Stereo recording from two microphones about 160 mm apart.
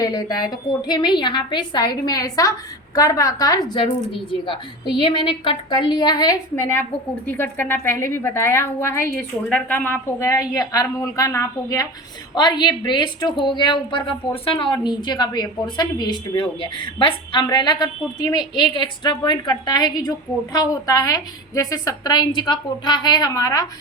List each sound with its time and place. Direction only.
0.0 s a woman's voice: 25° left (ahead or behind)